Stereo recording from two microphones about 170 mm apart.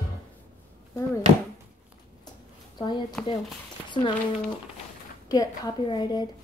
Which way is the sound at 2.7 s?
25° left (ahead or behind).